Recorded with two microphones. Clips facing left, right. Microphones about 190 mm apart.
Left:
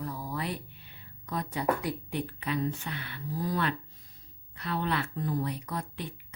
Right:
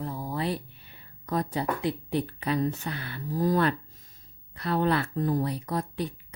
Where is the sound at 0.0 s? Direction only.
25° right (ahead or behind).